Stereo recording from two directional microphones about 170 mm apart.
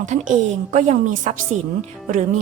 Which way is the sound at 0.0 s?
45° right (ahead or behind).